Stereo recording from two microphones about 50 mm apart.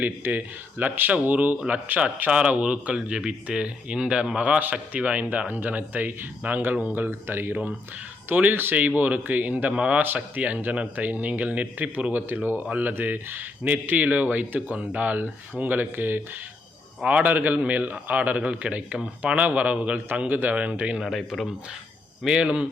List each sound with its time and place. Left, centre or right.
0.0 s speech: right
7.1 s speech: right
8.3 s speech: right
9.7 s speech: right
10.2 s speech: right
12.1 s speech: right
17.0 s speech: right
21.0 s speech: centre
22.4 s speech: right